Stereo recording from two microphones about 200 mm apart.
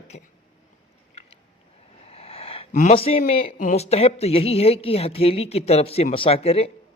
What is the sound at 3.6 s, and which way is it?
A woman's voice, 35° left (ahead or behind).